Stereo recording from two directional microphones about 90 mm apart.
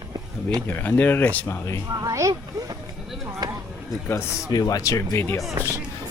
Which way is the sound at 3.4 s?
50° right (ahead or behind).